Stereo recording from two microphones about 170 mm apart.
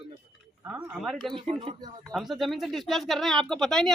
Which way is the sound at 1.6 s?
30° right (ahead or behind).